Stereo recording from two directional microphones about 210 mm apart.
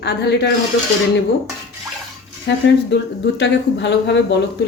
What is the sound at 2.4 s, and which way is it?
A woman's voice, 55° left (ahead or behind).